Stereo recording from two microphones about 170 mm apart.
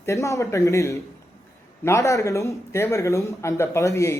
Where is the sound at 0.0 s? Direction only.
15° left (ahead or behind).